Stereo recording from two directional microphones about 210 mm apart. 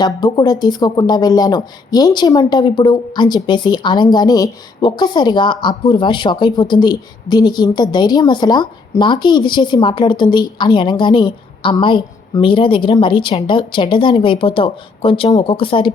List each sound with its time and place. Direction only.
0.0 s speech: 20° left (ahead or behind)